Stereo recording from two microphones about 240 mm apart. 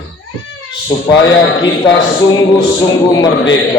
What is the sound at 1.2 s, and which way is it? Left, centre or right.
A man's voice, left.